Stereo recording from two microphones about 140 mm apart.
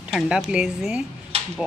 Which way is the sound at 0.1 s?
5° right (ahead or behind).